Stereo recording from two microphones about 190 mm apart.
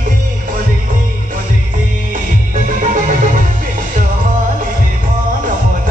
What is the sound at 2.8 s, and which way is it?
Music, 45° right (ahead or behind).